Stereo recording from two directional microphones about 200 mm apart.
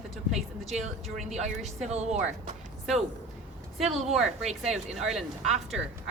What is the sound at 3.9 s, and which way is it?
A woman's voice, centre (ahead or behind).